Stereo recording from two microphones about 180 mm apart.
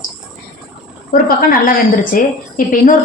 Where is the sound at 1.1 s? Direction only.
50° left (ahead or behind).